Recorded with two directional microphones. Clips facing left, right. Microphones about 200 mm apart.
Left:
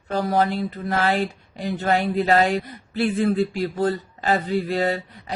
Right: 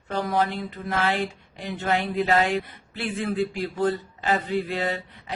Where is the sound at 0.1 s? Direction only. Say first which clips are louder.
Left 4 dB; 40° left (ahead or behind).